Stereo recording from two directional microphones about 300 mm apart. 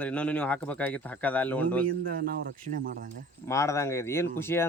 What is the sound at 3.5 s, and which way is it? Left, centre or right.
Speech, centre.